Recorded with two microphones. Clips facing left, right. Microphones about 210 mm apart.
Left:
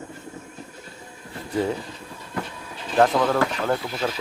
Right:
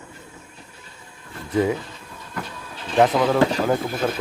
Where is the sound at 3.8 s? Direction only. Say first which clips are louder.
Right 3 dB; 50° right (ahead or behind).